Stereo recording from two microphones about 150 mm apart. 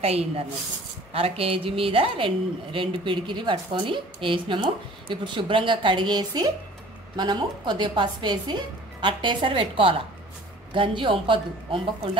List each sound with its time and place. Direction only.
1.1 s a woman's voice: 40° right (ahead or behind)